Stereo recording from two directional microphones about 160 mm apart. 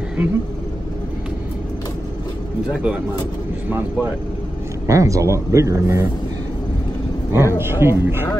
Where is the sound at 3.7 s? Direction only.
15° right (ahead or behind).